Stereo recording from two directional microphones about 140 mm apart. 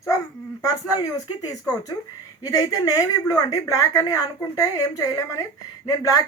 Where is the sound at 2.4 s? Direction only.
25° left (ahead or behind).